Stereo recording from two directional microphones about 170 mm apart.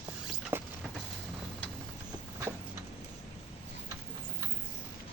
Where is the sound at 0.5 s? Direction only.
15° right (ahead or behind).